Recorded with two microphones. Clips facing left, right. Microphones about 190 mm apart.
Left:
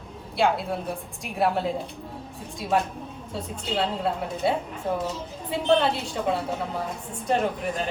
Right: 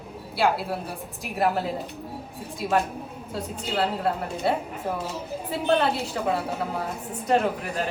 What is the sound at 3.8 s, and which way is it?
Speech, centre (ahead or behind).